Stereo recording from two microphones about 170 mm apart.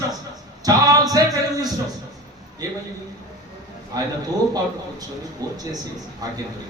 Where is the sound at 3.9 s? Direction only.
20° right (ahead or behind).